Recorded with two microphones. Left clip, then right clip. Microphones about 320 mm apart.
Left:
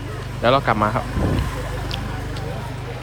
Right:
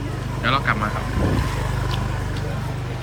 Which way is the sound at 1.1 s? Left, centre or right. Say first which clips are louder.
Even; centre.